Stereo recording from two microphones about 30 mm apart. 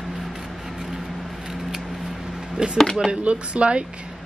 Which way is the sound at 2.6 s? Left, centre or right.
Right.